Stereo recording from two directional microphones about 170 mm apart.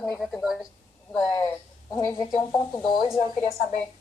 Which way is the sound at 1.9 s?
15° left (ahead or behind).